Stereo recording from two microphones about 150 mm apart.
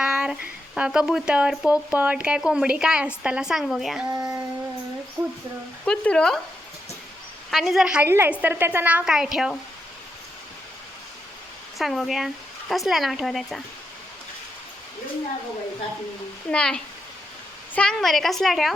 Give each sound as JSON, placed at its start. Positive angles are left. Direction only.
{"t": 0.0, "sound": "speech", "side_deg": -5}
{"t": 4.1, "sound": "a sound", "side_deg": -25}
{"t": 5.2, "sound": "a woman's voice", "side_deg": -15}
{"t": 5.8, "sound": "speech", "side_deg": 5}
{"t": 7.5, "sound": "a woman's voice", "side_deg": 0}
{"t": 11.8, "sound": "speech", "side_deg": 0}
{"t": 16.5, "sound": "speech", "side_deg": 5}